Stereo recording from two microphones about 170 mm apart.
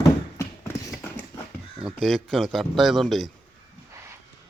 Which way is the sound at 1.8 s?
Centre (ahead or behind).